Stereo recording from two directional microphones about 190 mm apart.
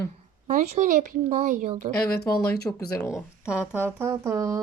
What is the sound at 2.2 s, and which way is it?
Speech, 55° left (ahead or behind).